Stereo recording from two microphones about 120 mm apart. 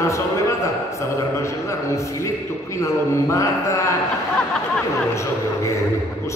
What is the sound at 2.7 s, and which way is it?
A man's voice, 25° left (ahead or behind).